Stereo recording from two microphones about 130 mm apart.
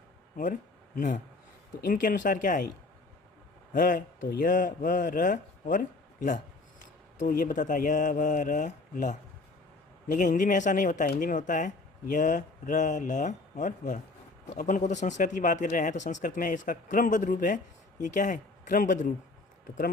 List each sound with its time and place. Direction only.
0.9 s speech: 75° left (ahead or behind)
1.8 s speech: 90° left
3.7 s speech: 85° left